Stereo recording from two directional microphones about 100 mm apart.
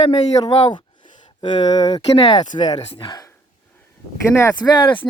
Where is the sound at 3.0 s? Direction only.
40° left (ahead or behind).